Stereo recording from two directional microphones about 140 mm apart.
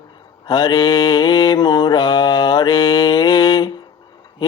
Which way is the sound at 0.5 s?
30° left (ahead or behind).